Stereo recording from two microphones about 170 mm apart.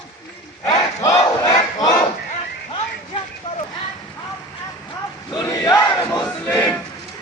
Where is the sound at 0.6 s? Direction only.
20° left (ahead or behind).